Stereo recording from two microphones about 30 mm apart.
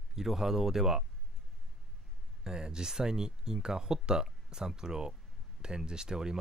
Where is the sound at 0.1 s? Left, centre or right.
Centre.